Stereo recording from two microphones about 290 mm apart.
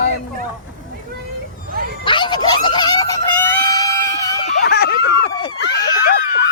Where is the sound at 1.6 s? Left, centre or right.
Right.